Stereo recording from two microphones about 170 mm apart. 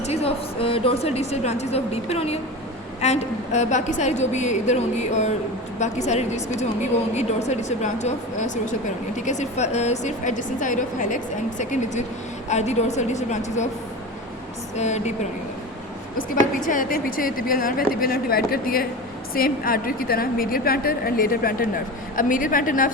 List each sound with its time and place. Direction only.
0.0 s a woman's voice: 40° left (ahead or behind)
14.8 s a woman's voice: 40° left (ahead or behind)
16.3 s a woman's voice: 50° left (ahead or behind)